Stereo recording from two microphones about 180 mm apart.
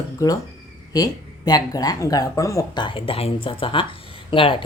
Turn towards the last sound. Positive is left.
turn(degrees=30)  # may be behind; listen again after turning